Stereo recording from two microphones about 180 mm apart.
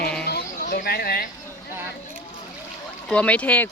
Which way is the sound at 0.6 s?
55° left (ahead or behind).